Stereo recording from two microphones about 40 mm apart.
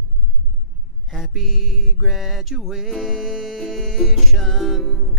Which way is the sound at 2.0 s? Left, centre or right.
Centre.